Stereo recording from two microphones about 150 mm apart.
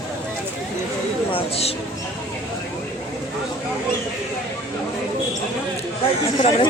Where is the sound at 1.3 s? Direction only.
40° left (ahead or behind).